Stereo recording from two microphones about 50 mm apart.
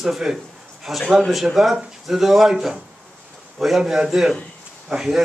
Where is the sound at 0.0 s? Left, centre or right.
Centre.